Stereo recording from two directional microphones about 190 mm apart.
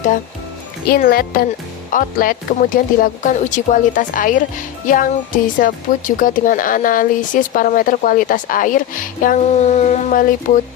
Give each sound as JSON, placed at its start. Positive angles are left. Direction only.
{"t": 0.9, "sound": "speech", "side_deg": 50}